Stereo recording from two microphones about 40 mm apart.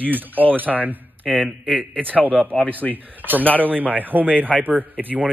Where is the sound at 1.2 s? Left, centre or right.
Centre.